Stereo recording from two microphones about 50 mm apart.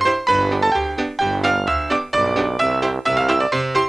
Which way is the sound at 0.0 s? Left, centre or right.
Centre.